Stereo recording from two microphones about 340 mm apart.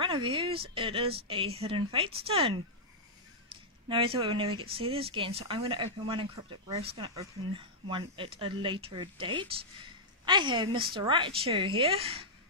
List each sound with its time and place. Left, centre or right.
0.0 s speech: centre
3.9 s speech: centre